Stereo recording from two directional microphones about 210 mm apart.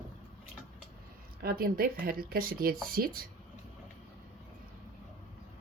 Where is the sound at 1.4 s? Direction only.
45° right (ahead or behind).